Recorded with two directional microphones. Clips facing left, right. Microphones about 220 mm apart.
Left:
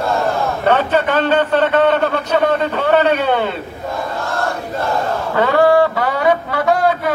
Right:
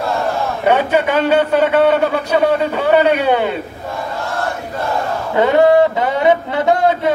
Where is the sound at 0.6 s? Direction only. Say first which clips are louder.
Right 2 dB; 10° right (ahead or behind).